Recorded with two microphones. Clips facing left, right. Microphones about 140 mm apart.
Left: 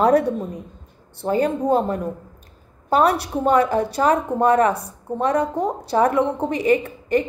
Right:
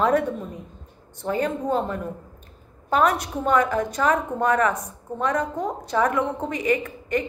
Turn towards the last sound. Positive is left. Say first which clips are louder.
# left 5 dB
turn(degrees=35)  # may be behind; listen again after turning